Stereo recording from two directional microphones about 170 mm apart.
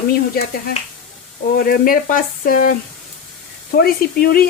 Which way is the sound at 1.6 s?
60° left (ahead or behind).